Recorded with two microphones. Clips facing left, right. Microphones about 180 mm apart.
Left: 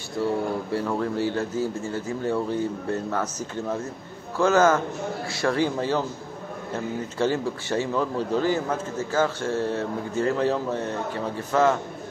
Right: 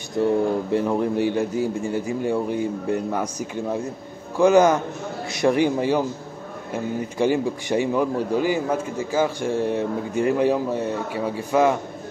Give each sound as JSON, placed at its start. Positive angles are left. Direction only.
{"t": 0.2, "sound": "speech", "side_deg": -20}